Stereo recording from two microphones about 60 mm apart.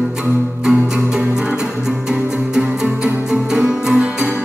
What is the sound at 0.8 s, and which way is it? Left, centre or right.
Music, centre.